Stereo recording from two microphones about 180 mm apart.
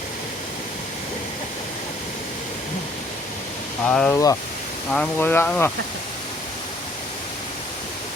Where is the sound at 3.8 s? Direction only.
5° left (ahead or behind).